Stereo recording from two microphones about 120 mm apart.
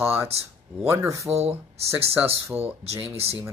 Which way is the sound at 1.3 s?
60° right (ahead or behind).